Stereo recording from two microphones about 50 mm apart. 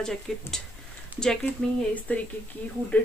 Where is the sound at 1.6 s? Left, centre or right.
Left.